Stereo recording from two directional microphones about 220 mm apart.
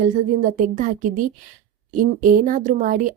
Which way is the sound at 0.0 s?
35° right (ahead or behind).